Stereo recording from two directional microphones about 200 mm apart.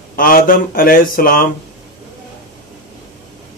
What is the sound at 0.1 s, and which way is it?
Speech, 45° left (ahead or behind).